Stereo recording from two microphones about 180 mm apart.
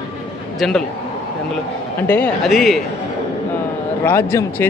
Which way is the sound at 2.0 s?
10° left (ahead or behind).